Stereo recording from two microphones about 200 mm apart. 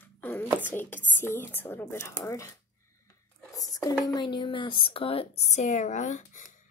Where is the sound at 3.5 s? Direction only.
15° left (ahead or behind).